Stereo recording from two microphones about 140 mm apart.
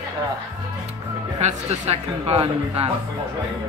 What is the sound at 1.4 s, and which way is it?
Speech, 50° right (ahead or behind).